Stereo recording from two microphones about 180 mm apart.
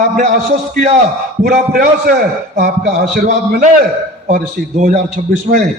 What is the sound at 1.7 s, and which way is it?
Speech, 60° right (ahead or behind).